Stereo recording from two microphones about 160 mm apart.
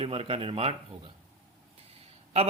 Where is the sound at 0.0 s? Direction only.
35° right (ahead or behind).